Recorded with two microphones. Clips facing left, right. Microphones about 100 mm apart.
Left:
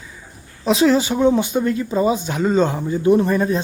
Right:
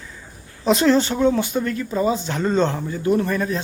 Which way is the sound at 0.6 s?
Centre (ahead or behind).